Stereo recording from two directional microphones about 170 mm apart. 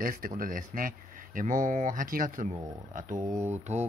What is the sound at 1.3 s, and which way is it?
Mantra, 50° right (ahead or behind).